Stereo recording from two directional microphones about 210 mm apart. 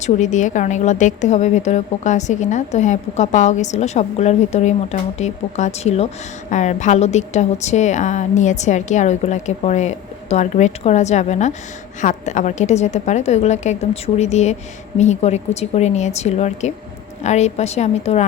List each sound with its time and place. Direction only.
0.0 s a woman's voice: 35° left (ahead or behind)